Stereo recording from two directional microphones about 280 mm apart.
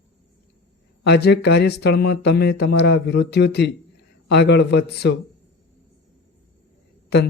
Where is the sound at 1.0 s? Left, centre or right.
Left.